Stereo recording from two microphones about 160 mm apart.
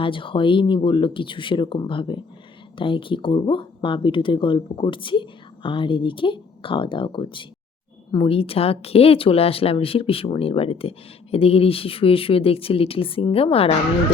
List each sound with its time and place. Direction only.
0.0 s speech: 30° left (ahead or behind)